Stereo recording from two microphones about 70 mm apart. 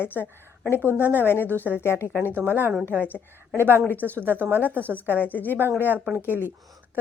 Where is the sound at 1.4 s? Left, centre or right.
Right.